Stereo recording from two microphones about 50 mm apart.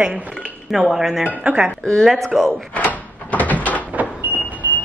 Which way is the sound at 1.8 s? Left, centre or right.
Centre.